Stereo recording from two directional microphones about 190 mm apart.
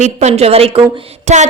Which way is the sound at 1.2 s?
40° right (ahead or behind).